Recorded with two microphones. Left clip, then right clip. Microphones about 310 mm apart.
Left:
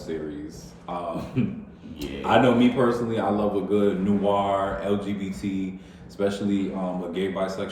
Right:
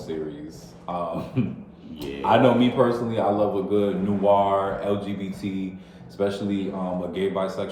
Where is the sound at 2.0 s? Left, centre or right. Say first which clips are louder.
Right 1 dB; centre.